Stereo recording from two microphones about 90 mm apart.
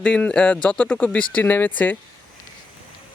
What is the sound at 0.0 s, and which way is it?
Speech, 10° left (ahead or behind).